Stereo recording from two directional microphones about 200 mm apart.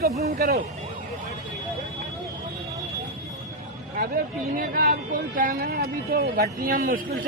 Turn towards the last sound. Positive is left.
turn(degrees=-45)  # may be behind; listen again after turning